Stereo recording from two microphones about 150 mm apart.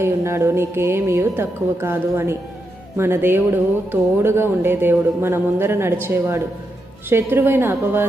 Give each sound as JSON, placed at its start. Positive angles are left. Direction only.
{"t": 0.0, "sound": "a woman's voice", "side_deg": -15}